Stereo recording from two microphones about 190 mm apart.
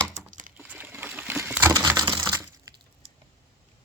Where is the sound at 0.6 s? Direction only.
10° right (ahead or behind).